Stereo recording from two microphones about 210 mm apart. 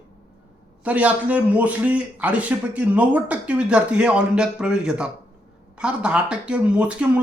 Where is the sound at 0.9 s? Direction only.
5° right (ahead or behind).